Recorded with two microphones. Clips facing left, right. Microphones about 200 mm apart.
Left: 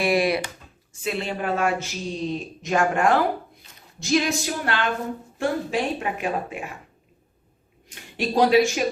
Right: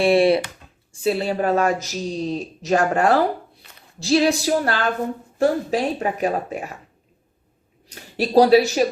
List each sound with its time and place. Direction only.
0.0 s a woman's voice: 30° right (ahead or behind)
7.9 s speech: 40° right (ahead or behind)